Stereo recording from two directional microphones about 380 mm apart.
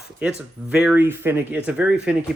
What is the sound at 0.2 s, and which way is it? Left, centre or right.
Speech, centre.